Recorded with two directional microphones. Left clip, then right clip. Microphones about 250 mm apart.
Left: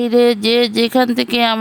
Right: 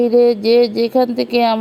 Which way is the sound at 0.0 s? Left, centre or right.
Left.